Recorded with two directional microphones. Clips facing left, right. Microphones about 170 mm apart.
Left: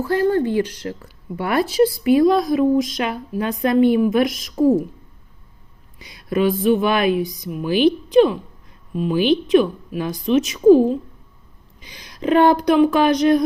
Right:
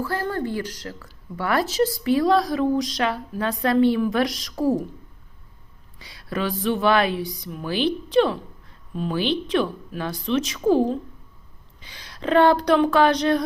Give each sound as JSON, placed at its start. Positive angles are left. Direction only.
{"t": 0.0, "sound": "speech", "side_deg": 20}
{"t": 6.0, "sound": "speech", "side_deg": 15}